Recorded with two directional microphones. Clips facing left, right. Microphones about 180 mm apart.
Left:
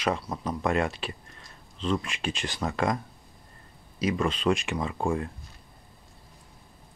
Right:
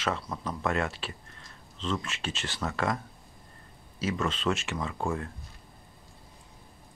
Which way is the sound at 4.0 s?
15° left (ahead or behind).